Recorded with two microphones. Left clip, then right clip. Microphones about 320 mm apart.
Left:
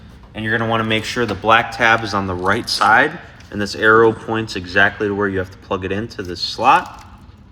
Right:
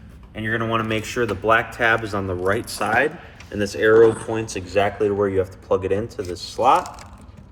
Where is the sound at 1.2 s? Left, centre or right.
Left.